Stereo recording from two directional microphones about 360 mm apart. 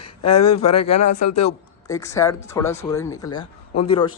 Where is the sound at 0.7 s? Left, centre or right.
Left.